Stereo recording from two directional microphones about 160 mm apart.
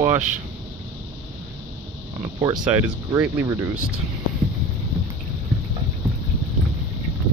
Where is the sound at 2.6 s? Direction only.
10° right (ahead or behind).